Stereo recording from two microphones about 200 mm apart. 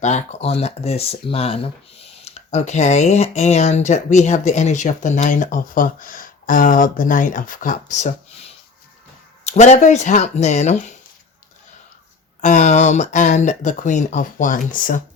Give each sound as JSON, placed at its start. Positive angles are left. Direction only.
{"t": 0.0, "sound": "speech", "side_deg": 35}
{"t": 9.5, "sound": "speech", "side_deg": 35}
{"t": 12.4, "sound": "speech", "side_deg": 35}